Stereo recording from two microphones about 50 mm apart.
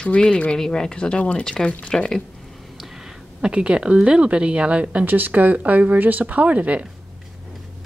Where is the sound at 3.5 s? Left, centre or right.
Centre.